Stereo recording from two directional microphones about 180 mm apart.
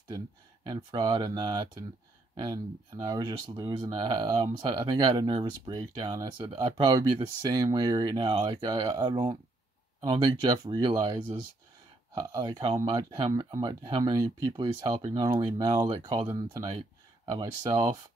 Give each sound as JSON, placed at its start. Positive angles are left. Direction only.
{"t": 0.7, "sound": "speech", "side_deg": -25}